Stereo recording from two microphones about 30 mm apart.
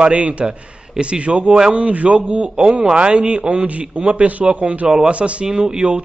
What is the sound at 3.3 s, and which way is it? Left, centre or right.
Speech, right.